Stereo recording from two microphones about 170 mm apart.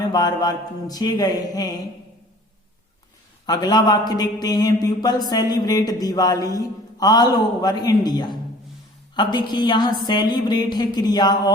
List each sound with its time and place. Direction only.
0.1 s speech: 25° left (ahead or behind)
3.4 s speech: 25° left (ahead or behind)